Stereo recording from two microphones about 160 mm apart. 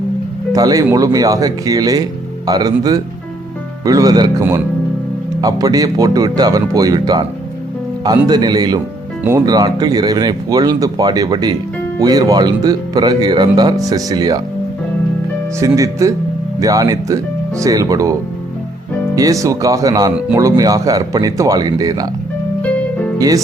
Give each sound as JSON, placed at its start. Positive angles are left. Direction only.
{"t": 0.5, "sound": "speech", "side_deg": -20}
{"t": 8.3, "sound": "speech", "side_deg": -25}
{"t": 15.6, "sound": "speech", "side_deg": -20}
{"t": 23.1, "sound": "speech", "side_deg": -20}